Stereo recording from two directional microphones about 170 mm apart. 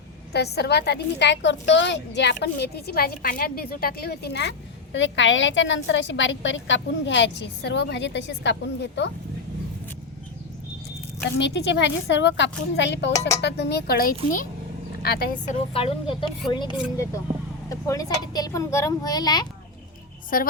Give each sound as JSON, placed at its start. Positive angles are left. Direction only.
{"t": 0.3, "sound": "a woman's voice", "side_deg": 75}
{"t": 2.4, "sound": "a woman's voice", "side_deg": 75}
{"t": 11.3, "sound": "a woman's voice", "side_deg": 90}
{"t": 13.4, "sound": "a woman's voice", "side_deg": 75}
{"t": 15.0, "sound": "a woman's voice", "side_deg": 65}
{"t": 15.7, "sound": "speech", "side_deg": 30}
{"t": 20.3, "sound": "a woman's voice", "side_deg": 55}